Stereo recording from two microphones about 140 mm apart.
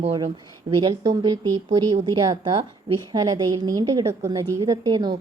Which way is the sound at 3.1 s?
25° right (ahead or behind).